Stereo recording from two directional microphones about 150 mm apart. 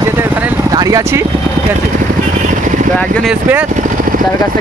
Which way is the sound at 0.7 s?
25° right (ahead or behind).